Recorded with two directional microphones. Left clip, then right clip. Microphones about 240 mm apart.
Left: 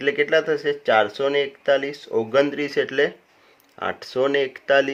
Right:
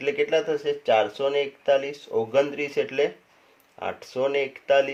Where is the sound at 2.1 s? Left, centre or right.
Left.